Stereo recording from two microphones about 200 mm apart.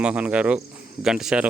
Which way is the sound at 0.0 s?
5° right (ahead or behind).